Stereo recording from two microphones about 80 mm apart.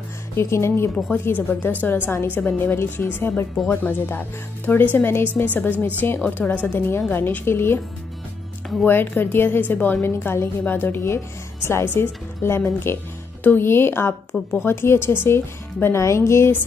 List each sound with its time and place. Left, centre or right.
0.4 s speech: left
0.9 s a woman's voice: centre
1.2 s a woman's voice: left
8.8 s a woman's voice: left